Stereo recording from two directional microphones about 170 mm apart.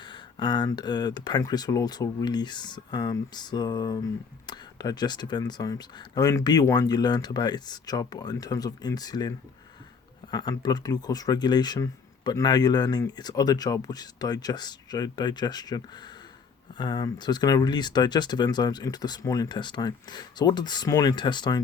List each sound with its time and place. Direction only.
0.0 s speech: 25° left (ahead or behind)
10.3 s speech: 25° left (ahead or behind)